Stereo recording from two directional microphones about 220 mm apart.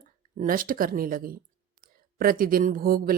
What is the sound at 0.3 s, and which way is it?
A woman's voice, 40° right (ahead or behind).